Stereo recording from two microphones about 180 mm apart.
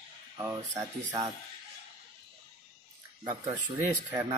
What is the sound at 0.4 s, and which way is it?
Speech, 20° right (ahead or behind).